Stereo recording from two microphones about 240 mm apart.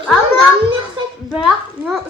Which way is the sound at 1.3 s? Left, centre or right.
Centre.